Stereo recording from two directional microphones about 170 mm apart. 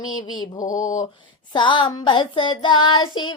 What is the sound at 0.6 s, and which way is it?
Mantra, 50° left (ahead or behind).